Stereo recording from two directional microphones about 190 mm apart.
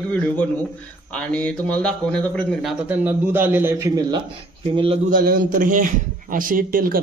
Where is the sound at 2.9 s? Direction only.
10° right (ahead or behind).